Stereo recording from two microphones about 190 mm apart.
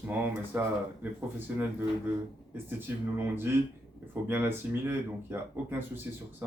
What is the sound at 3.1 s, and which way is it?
Speech, 10° right (ahead or behind).